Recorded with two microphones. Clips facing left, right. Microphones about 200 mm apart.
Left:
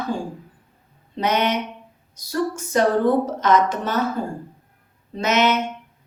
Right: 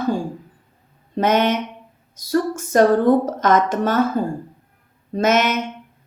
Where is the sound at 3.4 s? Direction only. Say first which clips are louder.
Right 2 dB; 50° right (ahead or behind).